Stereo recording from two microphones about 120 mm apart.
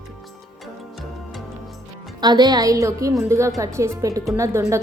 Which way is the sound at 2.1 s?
35° right (ahead or behind).